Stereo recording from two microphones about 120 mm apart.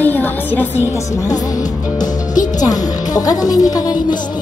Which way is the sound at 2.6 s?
30° left (ahead or behind).